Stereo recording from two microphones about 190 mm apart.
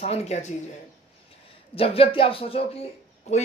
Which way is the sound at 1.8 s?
30° left (ahead or behind).